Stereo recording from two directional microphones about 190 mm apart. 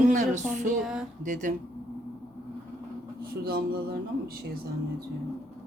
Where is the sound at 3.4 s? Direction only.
55° right (ahead or behind).